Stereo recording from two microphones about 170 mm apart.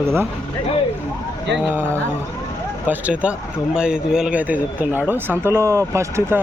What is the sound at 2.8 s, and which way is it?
Speech, 10° right (ahead or behind).